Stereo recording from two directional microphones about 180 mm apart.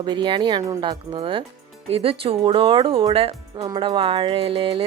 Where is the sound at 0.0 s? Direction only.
25° right (ahead or behind).